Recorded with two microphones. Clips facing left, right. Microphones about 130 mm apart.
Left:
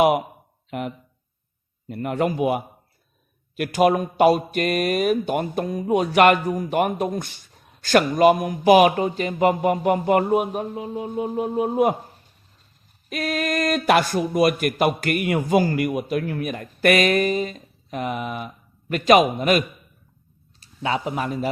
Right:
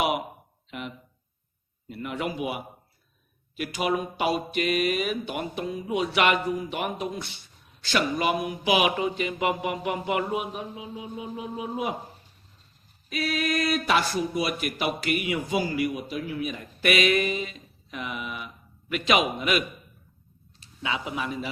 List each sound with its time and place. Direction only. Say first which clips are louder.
0.7 s speech: left 8 dB; 50° left (ahead or behind)
13.1 s speech: left 3 dB; 50° left (ahead or behind)